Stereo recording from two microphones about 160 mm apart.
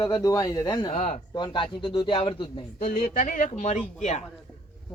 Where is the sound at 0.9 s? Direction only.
50° left (ahead or behind).